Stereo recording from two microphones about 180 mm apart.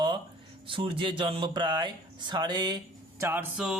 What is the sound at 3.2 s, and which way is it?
Music, 10° right (ahead or behind).